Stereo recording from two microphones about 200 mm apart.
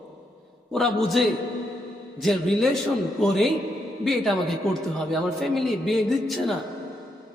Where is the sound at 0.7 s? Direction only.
Centre (ahead or behind).